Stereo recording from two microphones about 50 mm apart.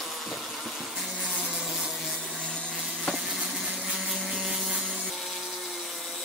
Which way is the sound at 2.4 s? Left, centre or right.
Left.